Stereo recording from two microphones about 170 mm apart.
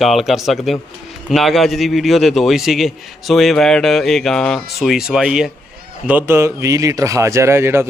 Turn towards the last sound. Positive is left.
turn(degrees=-15)  # may be behind; listen again after turning